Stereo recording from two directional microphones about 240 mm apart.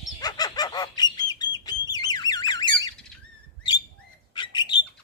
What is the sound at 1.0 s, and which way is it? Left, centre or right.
Bird, centre.